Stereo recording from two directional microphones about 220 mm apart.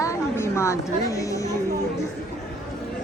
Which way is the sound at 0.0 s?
15° left (ahead or behind).